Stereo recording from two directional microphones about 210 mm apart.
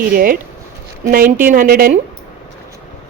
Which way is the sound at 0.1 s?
45° right (ahead or behind).